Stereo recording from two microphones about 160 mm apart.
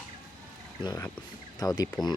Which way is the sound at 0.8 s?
30° left (ahead or behind).